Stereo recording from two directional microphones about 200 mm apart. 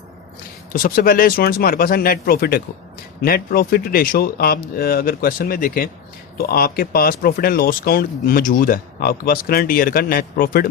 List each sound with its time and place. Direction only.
0.7 s speech: 45° left (ahead or behind)